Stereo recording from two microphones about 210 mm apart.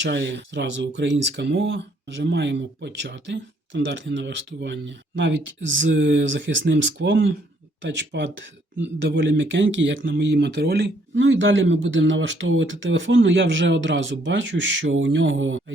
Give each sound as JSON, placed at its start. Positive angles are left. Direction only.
{"t": 0.0, "sound": "speech", "side_deg": -55}